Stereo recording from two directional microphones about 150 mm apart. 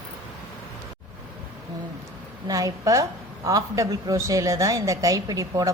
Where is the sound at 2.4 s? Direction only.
25° right (ahead or behind).